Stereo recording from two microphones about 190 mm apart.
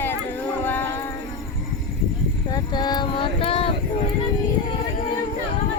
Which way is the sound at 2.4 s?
20° left (ahead or behind).